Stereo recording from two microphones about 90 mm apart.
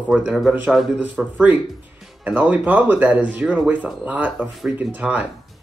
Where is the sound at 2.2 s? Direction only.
20° right (ahead or behind).